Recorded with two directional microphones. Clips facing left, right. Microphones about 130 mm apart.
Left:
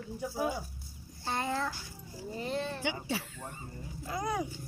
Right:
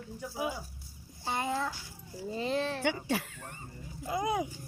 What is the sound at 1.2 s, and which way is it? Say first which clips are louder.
Speech: right 1 dB; 15° right (ahead or behind).